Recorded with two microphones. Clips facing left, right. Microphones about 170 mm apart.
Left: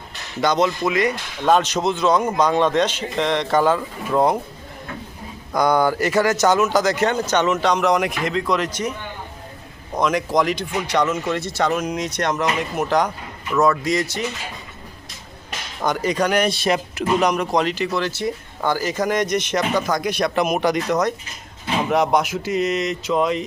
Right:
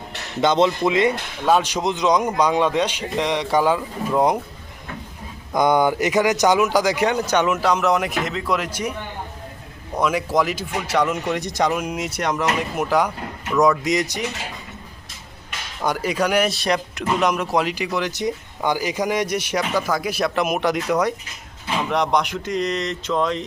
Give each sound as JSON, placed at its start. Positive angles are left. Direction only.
{"t": 0.4, "sound": "speech", "side_deg": -25}
{"t": 1.5, "sound": "speech", "side_deg": -10}
{"t": 5.5, "sound": "speech", "side_deg": -20}
{"t": 10.0, "sound": "speech", "side_deg": -5}
{"t": 15.8, "sound": "speech", "side_deg": -10}
{"t": 21.8, "sound": "speech", "side_deg": 5}